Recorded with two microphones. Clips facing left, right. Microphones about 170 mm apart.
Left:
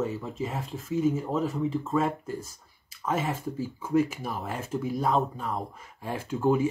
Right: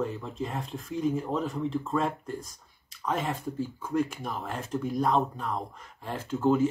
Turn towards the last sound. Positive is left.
turn(degrees=10)  # may be behind; listen again after turning